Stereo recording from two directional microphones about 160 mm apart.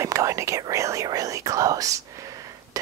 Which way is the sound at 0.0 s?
20° right (ahead or behind).